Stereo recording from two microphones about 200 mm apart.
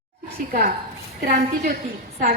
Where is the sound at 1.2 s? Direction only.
45° right (ahead or behind).